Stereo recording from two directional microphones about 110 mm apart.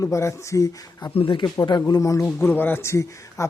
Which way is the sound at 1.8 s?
30° left (ahead or behind).